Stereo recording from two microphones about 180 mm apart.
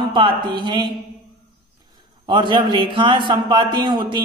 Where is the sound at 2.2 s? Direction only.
25° right (ahead or behind).